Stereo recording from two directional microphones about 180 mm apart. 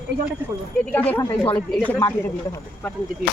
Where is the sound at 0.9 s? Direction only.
10° left (ahead or behind).